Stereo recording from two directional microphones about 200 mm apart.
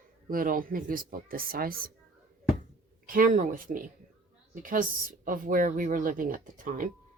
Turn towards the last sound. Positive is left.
turn(degrees=-40)  # may be behind; listen again after turning